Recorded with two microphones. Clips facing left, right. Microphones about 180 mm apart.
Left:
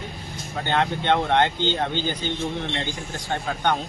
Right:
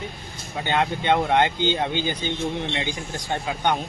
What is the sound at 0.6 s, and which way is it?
Speech, 10° right (ahead or behind).